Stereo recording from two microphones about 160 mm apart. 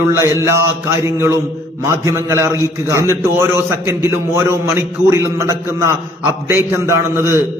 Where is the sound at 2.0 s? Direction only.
20° right (ahead or behind).